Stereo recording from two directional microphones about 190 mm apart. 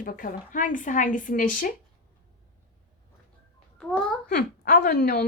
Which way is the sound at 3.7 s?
5° left (ahead or behind).